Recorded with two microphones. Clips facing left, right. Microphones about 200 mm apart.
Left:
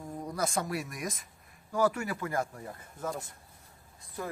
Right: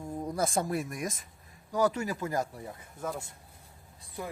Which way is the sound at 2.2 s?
20° right (ahead or behind).